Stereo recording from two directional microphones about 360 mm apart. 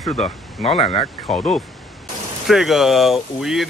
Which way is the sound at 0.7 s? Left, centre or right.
Centre.